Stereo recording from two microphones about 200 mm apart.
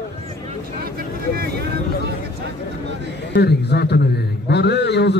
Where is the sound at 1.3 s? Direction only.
50° right (ahead or behind).